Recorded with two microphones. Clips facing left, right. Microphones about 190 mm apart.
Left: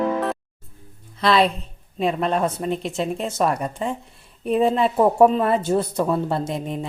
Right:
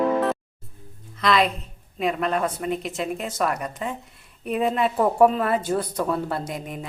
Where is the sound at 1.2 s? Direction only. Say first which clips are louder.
Left 3 dB; 30° left (ahead or behind).